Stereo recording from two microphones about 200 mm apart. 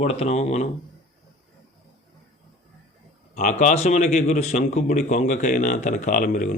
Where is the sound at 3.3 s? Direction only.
40° left (ahead or behind).